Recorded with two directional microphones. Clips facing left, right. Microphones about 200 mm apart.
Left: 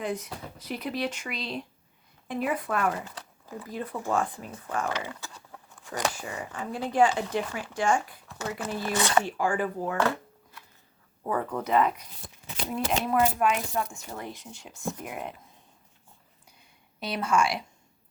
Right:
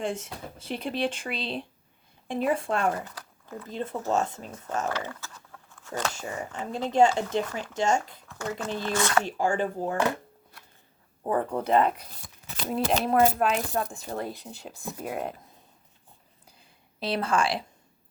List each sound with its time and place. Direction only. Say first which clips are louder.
0.0 s speech: right 1 dB; 30° right (ahead or behind)
3.4 s a sound: even; 5° left (ahead or behind)
3.7 s speech: right 2 dB; 25° right (ahead or behind)
4.9 s speech: right 1 dB; 15° left (ahead or behind)
5.5 s a sound: right 3 dB; 15° left (ahead or behind)
6.4 s speech: right 1 dB; 25° right (ahead or behind)
8.3 s speech: right 1 dB; 15° left (ahead or behind)
9.4 s speech: right 1 dB; 25° right (ahead or behind)
11.2 s speech: right 3 dB; 30° right (ahead or behind)
16.5 s a sound: right 2 dB; 30° right (ahead or behind)